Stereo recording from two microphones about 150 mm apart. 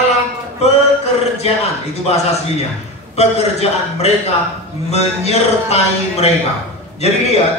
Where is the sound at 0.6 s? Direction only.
45° left (ahead or behind).